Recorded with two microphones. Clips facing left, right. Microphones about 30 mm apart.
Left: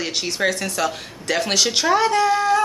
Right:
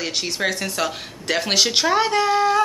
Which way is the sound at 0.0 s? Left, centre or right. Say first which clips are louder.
Left 2 dB; centre.